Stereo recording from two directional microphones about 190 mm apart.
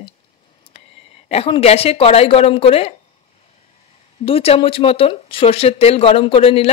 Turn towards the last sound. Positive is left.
turn(degrees=30)  # may be behind; listen again after turning